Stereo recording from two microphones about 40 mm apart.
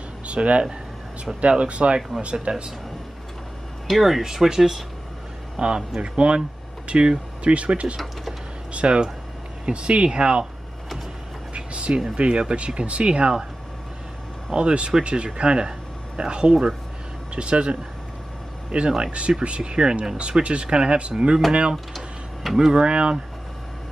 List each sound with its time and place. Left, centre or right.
0.3 s speech: right
2.0 s speech: centre
2.5 s speech: right
3.8 s speech: centre
5.6 s speech: right
11.5 s a sound: right
12.2 s speech: right
14.5 s speech: right
21.9 s a sound: centre
22.8 s speech: right